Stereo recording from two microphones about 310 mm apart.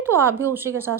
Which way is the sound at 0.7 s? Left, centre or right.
Right.